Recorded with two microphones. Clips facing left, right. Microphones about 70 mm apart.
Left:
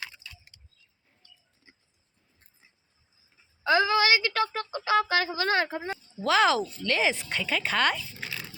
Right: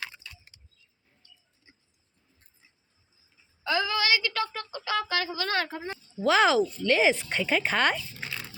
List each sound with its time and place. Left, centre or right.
3.6 s a woman's voice: left
5.5 s speech: centre
6.2 s speech: centre
8.2 s dog: centre